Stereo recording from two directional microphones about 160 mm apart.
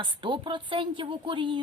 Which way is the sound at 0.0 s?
30° right (ahead or behind).